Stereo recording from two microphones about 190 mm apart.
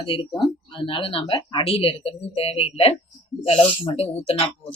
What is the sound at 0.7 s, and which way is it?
A woman's voice, 25° left (ahead or behind).